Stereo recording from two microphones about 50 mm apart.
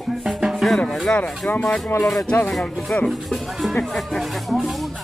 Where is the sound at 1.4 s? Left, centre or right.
Left.